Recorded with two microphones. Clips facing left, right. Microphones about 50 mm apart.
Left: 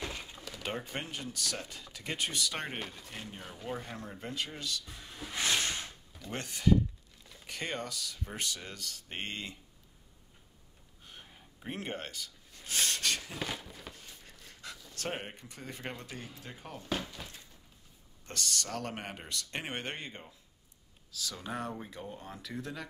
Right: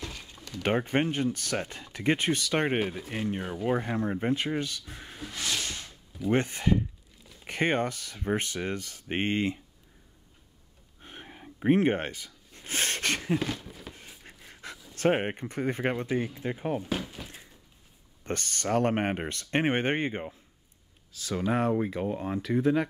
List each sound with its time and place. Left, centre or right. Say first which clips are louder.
0.0 s a sound: left 1 dB; centre
0.7 s speech: right 12 dB; right
2.8 s speech: right 12 dB; centre
3.1 s speech: right 12 dB; right
5.3 s a sound: left 2 dB; left
6.3 s speech: right 3 dB; right
11.0 s a sound: right 8 dB; right
13.4 s a sound: right 5 dB; centre
14.4 s pant: right 4 dB; right
15.0 s speech: right 14 dB; right
18.2 s speech: right 5 dB; right
21.9 s speech: right 13 dB; right
22.6 s speech: right 17 dB; right